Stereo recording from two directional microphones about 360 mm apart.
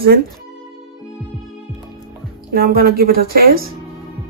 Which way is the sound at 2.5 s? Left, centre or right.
Right.